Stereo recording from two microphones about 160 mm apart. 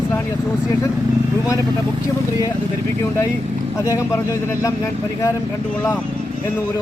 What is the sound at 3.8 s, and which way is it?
Speech, 20° left (ahead or behind).